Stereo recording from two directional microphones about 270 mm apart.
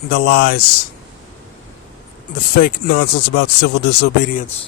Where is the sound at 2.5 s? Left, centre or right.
Left.